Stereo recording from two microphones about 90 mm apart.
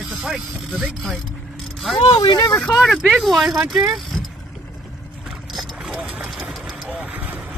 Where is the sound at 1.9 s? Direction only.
70° left (ahead or behind).